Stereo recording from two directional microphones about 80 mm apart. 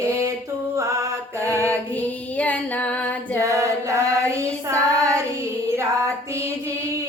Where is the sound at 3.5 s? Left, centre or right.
Right.